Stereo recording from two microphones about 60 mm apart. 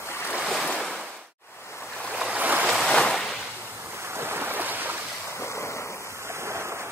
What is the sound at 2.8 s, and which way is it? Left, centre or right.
Waves, centre.